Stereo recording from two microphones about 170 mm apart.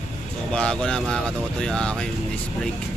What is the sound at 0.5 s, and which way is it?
Speech, 5° left (ahead or behind).